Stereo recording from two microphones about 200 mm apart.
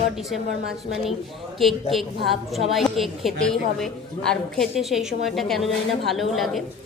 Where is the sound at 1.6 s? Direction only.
Centre (ahead or behind).